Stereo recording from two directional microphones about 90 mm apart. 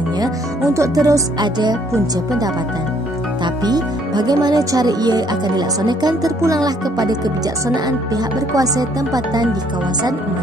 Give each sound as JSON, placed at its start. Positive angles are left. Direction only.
{"t": 0.7, "sound": "speech", "side_deg": -40}
{"t": 3.6, "sound": "speech", "side_deg": -50}
{"t": 8.5, "sound": "speech", "side_deg": -45}